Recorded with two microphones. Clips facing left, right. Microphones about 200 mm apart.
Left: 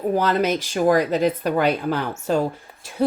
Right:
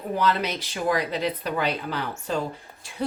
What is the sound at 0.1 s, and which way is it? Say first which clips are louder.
Speech: left 4 dB; 45° left (ahead or behind).